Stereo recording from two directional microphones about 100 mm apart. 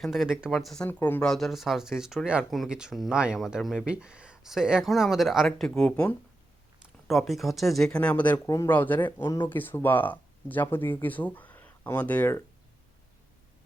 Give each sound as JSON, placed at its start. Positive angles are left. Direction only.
{"t": 0.0, "sound": "speech", "side_deg": -5}
{"t": 0.9, "sound": "speech", "side_deg": 20}
{"t": 1.2, "sound": "speech", "side_deg": 5}
{"t": 8.4, "sound": "speech", "side_deg": 40}
{"t": 8.7, "sound": "speech", "side_deg": 15}